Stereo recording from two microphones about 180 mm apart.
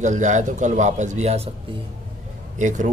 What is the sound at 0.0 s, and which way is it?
Speech, 40° right (ahead or behind).